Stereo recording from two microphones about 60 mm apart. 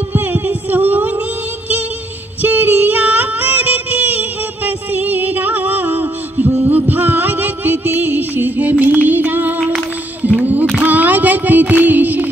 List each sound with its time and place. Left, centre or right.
0.1 s music: right
2.4 s music: right
10.8 s a sound: right